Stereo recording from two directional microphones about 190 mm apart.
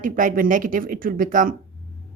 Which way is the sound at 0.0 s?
45° right (ahead or behind).